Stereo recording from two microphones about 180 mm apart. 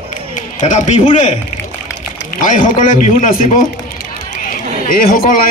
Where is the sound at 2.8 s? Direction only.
45° left (ahead or behind).